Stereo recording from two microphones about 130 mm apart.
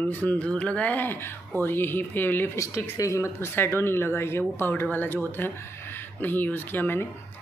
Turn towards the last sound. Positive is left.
turn(degrees=15)  # may be behind; listen again after turning